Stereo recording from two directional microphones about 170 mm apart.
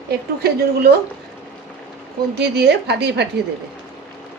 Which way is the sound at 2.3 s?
75° right (ahead or behind).